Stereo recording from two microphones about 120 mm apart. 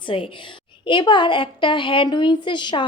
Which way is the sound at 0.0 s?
45° left (ahead or behind).